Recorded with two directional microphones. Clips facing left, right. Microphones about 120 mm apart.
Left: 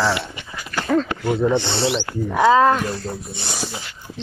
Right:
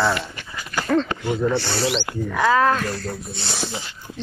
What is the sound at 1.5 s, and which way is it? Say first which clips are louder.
Speech: left 2 dB; 20° left (ahead or behind).